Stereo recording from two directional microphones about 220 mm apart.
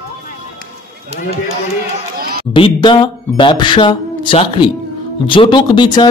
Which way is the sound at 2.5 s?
20° left (ahead or behind).